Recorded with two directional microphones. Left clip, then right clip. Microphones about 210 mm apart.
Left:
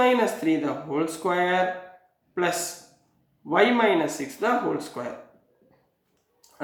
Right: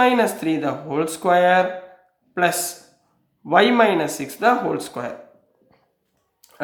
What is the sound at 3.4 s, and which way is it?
Speech, 45° right (ahead or behind).